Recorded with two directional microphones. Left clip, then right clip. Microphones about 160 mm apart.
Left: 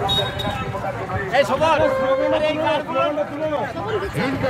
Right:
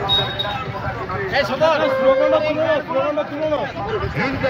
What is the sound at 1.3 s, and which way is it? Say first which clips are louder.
Speech: even; 70° left (ahead or behind).